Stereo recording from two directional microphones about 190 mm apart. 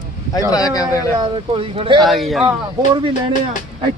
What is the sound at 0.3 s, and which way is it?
Speech, 20° left (ahead or behind).